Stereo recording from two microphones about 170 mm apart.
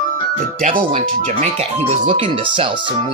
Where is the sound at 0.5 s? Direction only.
50° right (ahead or behind).